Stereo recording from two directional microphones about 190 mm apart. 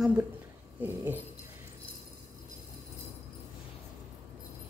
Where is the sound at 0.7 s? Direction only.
10° right (ahead or behind).